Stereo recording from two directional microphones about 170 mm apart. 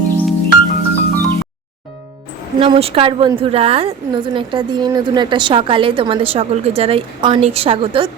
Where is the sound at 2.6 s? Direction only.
35° right (ahead or behind).